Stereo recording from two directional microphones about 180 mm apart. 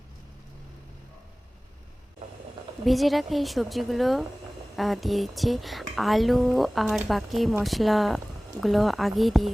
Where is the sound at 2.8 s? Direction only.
Centre (ahead or behind).